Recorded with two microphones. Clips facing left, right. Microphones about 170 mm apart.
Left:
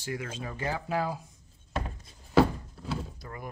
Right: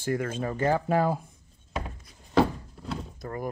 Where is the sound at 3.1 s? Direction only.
45° right (ahead or behind).